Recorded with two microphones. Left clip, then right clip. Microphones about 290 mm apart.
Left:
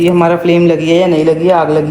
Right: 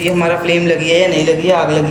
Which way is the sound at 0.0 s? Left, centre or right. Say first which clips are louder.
Left 4 dB; centre.